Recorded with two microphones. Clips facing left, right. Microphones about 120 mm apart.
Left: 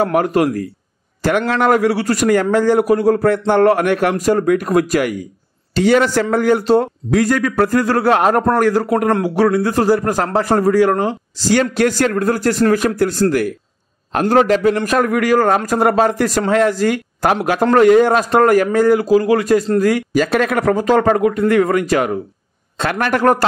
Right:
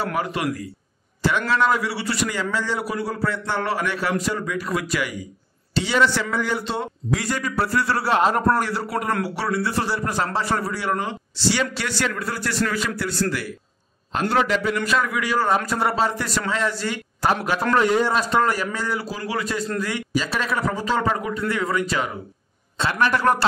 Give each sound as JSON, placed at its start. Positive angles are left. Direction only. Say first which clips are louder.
{"t": 0.0, "sound": "a man's voice", "louder": "left 10 dB", "side_deg": 50}
{"t": 1.5, "sound": "a man's voice", "louder": "left 8 dB", "side_deg": 55}